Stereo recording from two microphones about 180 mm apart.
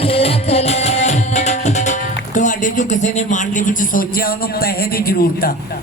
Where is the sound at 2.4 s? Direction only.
45° left (ahead or behind).